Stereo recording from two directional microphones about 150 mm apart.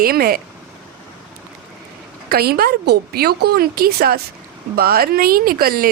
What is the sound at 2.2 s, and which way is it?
A woman's voice, 90° right.